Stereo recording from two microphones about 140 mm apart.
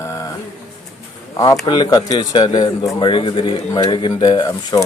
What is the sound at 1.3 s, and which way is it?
Speech, 25° left (ahead or behind).